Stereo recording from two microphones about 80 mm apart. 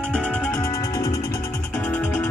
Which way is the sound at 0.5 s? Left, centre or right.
Left.